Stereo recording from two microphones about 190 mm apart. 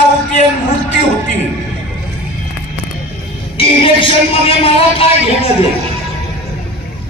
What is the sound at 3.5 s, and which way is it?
A man's voice, 30° left (ahead or behind).